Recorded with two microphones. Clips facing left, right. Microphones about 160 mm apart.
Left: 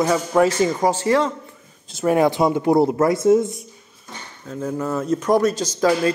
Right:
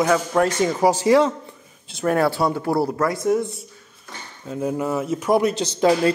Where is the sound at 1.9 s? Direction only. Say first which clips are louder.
Left 2 dB; 5° left (ahead or behind).